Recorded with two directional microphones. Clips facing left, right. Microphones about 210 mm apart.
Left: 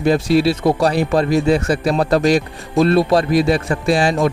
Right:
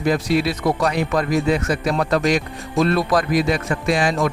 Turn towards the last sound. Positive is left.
turn(degrees=30)  # may be behind; listen again after turning